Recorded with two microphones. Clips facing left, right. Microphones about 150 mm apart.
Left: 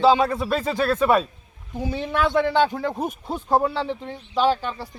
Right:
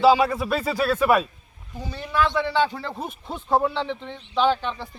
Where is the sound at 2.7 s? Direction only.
45° left (ahead or behind).